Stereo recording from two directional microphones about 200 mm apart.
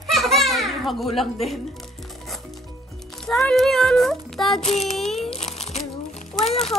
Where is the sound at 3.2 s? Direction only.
Centre (ahead or behind).